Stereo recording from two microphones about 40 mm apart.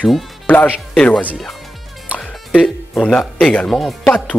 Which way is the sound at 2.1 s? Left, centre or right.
Right.